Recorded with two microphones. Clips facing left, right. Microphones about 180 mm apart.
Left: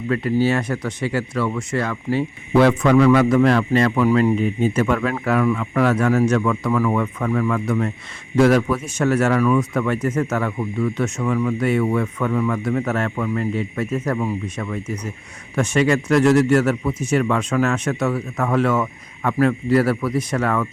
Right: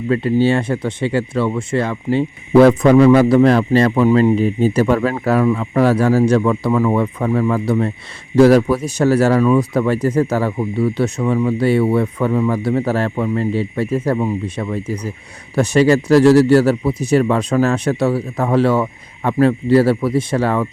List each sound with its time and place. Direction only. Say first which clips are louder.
0.1 s speech: right 4 dB; 30° right (ahead or behind)
2.5 s speech: right 6 dB; 40° right (ahead or behind)